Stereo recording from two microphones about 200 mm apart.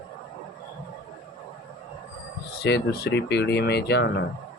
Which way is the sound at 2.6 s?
55° left (ahead or behind).